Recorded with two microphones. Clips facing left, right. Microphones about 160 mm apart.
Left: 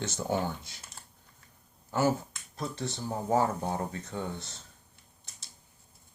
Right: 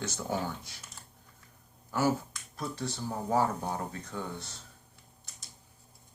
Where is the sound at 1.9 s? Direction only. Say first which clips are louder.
Left 1 dB; 25° left (ahead or behind).